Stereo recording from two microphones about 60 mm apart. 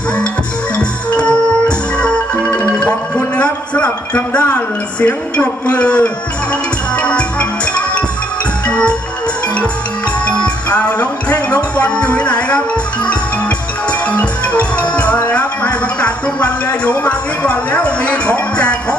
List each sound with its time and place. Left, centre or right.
0.8 s music: centre
3.3 s a sound: left
4.9 s speech: left
6.5 s music: left
10.2 s music: left
14.1 s music: left